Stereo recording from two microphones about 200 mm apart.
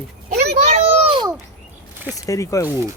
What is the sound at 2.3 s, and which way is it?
Speech, 15° left (ahead or behind).